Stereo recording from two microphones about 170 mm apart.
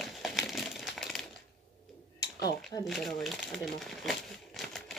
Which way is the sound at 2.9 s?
Centre (ahead or behind).